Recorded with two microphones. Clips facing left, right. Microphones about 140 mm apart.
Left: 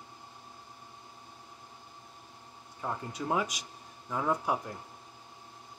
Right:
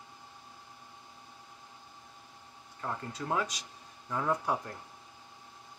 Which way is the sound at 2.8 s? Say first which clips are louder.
Left 2 dB; 15° left (ahead or behind).